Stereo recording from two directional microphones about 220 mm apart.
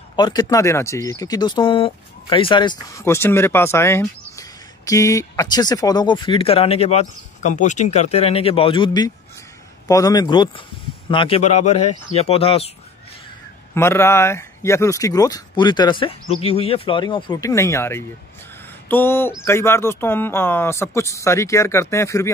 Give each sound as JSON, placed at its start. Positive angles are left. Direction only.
{"t": 0.1, "sound": "speech", "side_deg": 20}
{"t": 13.7, "sound": "speech", "side_deg": 10}